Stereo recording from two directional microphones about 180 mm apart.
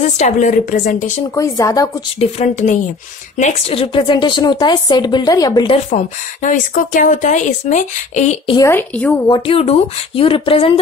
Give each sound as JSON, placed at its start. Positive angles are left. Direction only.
{"t": 0.0, "sound": "speech", "side_deg": 40}
{"t": 1.3, "sound": "a woman's voice", "side_deg": 20}
{"t": 2.1, "sound": "a woman's voice", "side_deg": 40}
{"t": 5.7, "sound": "speech", "side_deg": 40}
{"t": 8.5, "sound": "a woman's voice", "side_deg": 10}
{"t": 9.3, "sound": "speech", "side_deg": 30}